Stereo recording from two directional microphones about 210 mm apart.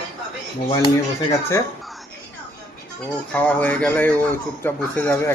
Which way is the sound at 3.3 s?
10° left (ahead or behind).